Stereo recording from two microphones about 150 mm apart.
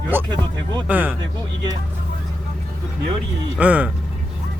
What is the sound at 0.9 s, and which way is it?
Speech, 10° right (ahead or behind).